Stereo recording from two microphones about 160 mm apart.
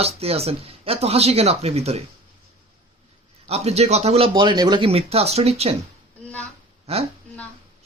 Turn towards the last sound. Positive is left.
turn(degrees=-40)  # may be behind; listen again after turning